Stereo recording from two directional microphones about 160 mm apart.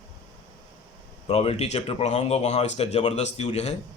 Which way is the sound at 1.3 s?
40° left (ahead or behind).